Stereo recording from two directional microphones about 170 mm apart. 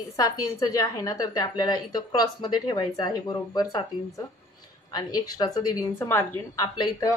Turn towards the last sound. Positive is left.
turn(degrees=25)  # may be behind; listen again after turning